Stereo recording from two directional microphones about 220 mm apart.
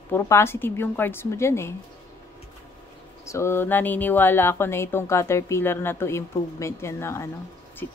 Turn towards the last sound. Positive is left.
turn(degrees=10)  # may be behind; listen again after turning